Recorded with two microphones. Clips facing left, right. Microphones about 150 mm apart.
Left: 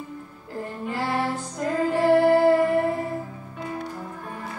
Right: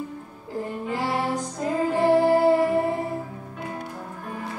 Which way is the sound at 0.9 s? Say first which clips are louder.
Even; 15° right (ahead or behind).